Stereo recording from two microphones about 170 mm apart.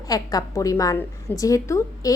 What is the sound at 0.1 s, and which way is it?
A child's voice, 20° left (ahead or behind).